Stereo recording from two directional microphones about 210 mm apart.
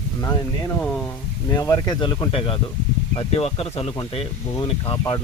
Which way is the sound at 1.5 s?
15° left (ahead or behind).